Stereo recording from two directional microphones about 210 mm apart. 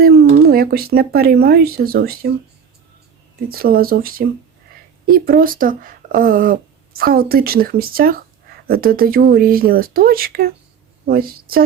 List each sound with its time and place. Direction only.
0.0 s speech: 45° right (ahead or behind)
3.5 s a woman's voice: 45° right (ahead or behind)